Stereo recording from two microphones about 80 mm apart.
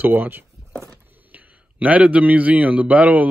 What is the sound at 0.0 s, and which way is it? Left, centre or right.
A man's voice, right.